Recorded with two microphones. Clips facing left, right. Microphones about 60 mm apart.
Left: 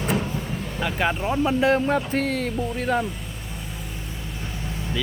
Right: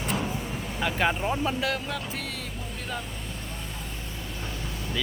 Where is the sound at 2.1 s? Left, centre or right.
Left.